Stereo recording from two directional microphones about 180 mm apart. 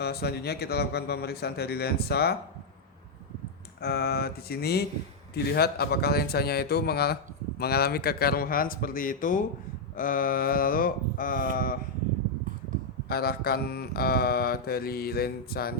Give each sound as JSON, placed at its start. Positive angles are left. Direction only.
{"t": 0.0, "sound": "mantra", "side_deg": 60}
{"t": 3.8, "sound": "mantra", "side_deg": 60}
{"t": 7.6, "sound": "speech", "side_deg": 60}
{"t": 13.1, "sound": "mantra", "side_deg": 60}